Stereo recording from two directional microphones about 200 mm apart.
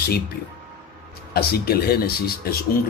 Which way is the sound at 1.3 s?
50° left (ahead or behind).